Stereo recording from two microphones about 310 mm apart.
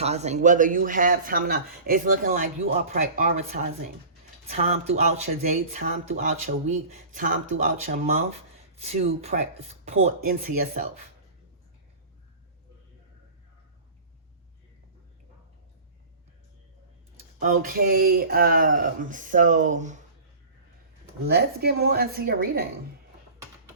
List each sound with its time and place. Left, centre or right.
0.0 s speech: right
17.4 s speech: right
21.2 s speech: right